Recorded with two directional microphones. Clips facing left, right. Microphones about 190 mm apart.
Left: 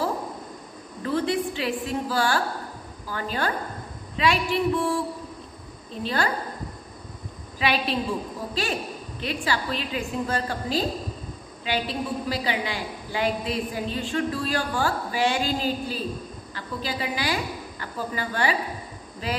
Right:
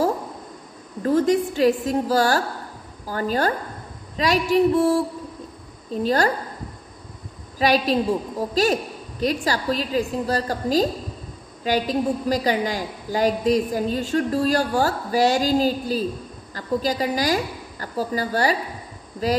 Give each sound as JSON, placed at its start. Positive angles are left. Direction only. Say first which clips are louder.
{"t": 1.0, "sound": "a woman's voice", "louder": "right 6 dB", "side_deg": -45}
{"t": 7.5, "sound": "a woman's voice", "louder": "right 6 dB", "side_deg": -40}
{"t": 9.2, "sound": "a woman's voice", "louder": "right 6 dB", "side_deg": -40}